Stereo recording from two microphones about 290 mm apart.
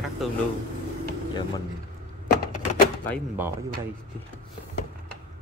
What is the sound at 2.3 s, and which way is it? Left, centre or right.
Typewriter, left.